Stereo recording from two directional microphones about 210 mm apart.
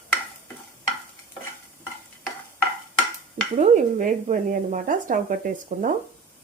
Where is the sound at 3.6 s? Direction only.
40° right (ahead or behind).